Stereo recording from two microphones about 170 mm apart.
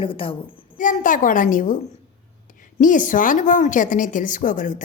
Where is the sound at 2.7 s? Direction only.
50° left (ahead or behind).